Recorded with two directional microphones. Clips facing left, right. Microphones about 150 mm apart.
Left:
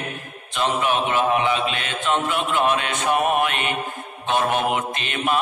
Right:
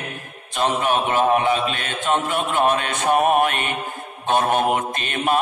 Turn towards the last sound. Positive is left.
turn(degrees=-45)  # may be behind; listen again after turning